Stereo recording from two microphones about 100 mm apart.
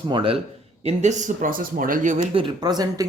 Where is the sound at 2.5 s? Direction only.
45° right (ahead or behind).